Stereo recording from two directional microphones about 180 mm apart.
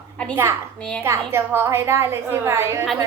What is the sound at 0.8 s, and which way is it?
Speech, 5° left (ahead or behind).